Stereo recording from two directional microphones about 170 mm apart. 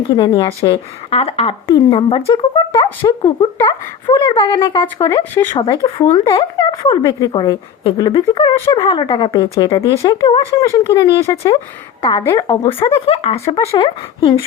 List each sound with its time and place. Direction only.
0.6 s a woman's voice: 30° left (ahead or behind)
3.6 s a woman's voice: 20° left (ahead or behind)
12.8 s a woman's voice: 35° left (ahead or behind)